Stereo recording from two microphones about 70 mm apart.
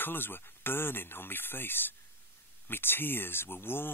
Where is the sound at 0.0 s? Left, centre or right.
Left.